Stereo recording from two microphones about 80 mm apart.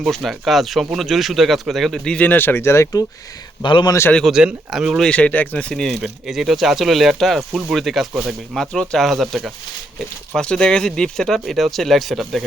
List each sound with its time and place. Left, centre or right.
0.0 s speech: centre; by 3.0 s left
3.6 s speech: left
4.3 s speech: centre
4.9 s speech: centre
10.3 s speech: centre